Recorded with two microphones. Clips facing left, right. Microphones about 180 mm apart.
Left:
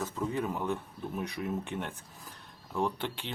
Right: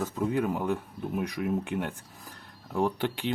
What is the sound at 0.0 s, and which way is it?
Speech, 10° right (ahead or behind).